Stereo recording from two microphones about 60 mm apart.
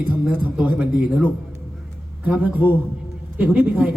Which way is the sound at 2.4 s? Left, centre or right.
Right.